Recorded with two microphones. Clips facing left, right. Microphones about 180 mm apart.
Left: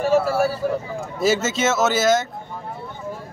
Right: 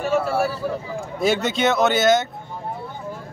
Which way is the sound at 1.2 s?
Centre (ahead or behind).